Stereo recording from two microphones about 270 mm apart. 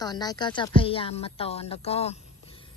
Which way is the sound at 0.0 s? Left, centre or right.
Centre.